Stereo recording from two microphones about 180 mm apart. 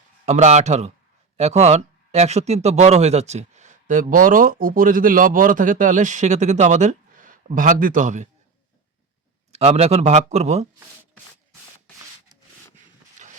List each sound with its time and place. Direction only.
0.3 s speech: 40° right (ahead or behind)
9.5 s speech: 35° right (ahead or behind)
13.2 s a sound: 40° right (ahead or behind)